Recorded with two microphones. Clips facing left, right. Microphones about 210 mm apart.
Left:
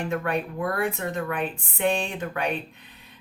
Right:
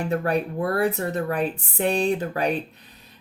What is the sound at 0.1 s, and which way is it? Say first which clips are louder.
Speech: right 3 dB; 35° right (ahead or behind).